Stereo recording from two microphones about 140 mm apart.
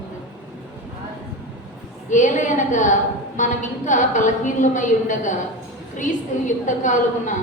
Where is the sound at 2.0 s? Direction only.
60° left (ahead or behind).